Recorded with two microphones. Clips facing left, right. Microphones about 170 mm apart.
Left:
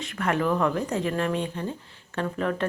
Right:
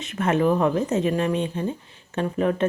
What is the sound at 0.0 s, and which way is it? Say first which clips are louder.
Speech: right 5 dB; 20° right (ahead or behind).